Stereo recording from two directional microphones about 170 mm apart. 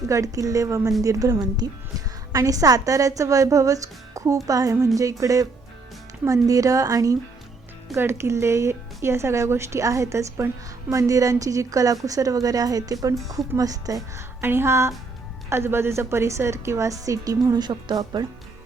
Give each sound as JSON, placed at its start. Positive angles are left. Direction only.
{"t": 0.1, "sound": "speech", "side_deg": -20}